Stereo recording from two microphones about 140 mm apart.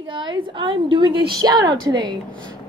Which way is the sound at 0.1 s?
35° right (ahead or behind).